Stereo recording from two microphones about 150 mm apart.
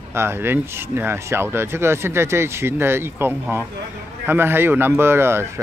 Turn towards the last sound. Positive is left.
turn(degrees=-15)  # may be behind; listen again after turning